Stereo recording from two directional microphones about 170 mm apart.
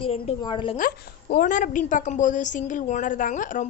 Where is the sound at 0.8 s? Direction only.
60° left (ahead or behind).